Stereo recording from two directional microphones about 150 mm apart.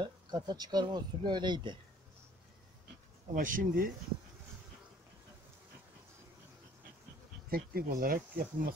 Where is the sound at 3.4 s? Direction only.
65° right (ahead or behind).